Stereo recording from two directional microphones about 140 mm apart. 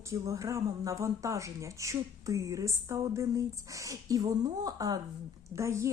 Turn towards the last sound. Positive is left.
turn(degrees=-20)  # may be behind; listen again after turning